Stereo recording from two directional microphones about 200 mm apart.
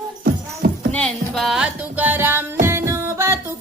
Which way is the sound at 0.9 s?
5° left (ahead or behind).